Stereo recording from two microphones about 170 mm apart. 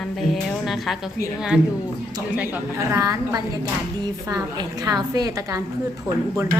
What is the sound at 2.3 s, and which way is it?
A woman's voice, 10° right (ahead or behind).